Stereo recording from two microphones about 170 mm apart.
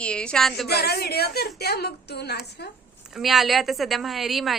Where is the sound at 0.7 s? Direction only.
70° left (ahead or behind).